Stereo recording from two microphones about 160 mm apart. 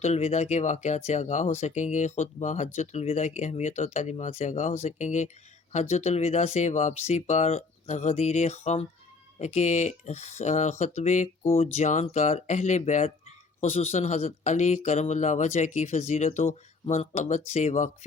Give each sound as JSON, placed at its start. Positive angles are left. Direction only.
{"t": 0.0, "sound": "speech", "side_deg": 40}